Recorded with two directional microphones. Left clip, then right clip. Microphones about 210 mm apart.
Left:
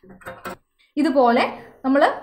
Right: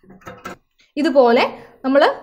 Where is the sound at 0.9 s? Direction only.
30° right (ahead or behind).